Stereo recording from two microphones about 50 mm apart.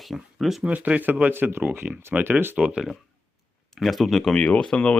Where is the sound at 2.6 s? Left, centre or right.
Centre.